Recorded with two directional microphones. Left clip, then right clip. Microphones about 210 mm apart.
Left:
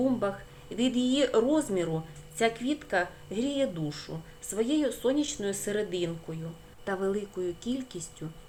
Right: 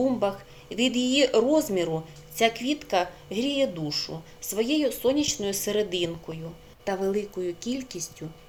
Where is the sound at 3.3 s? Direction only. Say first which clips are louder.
Right 4 dB; 10° left (ahead or behind).